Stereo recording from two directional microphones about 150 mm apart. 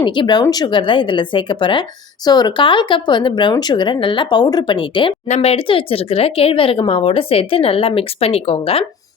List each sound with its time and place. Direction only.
0.0 s speech: 30° left (ahead or behind)